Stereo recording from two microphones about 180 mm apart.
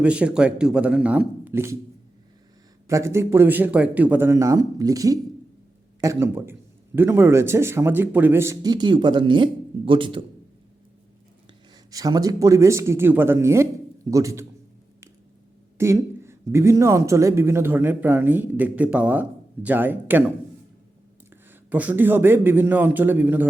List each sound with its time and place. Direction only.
0.0 s speech: 5° right (ahead or behind)
2.8 s speech: 15° right (ahead or behind)
11.9 s speech: 20° right (ahead or behind)
15.8 s speech: 15° right (ahead or behind)
21.7 s speech: 10° right (ahead or behind)